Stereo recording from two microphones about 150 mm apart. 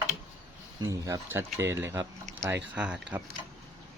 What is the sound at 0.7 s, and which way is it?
Speech, 20° right (ahead or behind).